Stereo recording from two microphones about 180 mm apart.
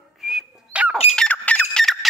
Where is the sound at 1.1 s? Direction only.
5° left (ahead or behind).